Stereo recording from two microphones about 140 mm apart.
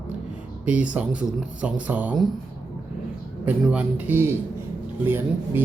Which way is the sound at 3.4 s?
10° right (ahead or behind).